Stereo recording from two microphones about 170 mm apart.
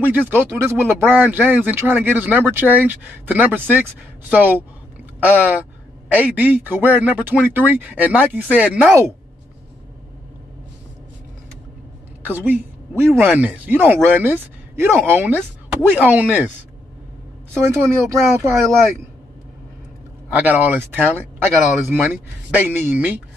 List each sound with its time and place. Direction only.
0.0 s speech: 10° right (ahead or behind)
12.2 s speech: 10° right (ahead or behind)
17.6 s speech: 15° right (ahead or behind)
20.3 s speech: 10° right (ahead or behind)